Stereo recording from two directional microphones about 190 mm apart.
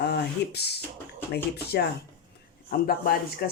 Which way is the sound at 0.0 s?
60° left (ahead or behind).